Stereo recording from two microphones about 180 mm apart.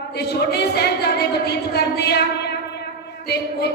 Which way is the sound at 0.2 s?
65° left (ahead or behind).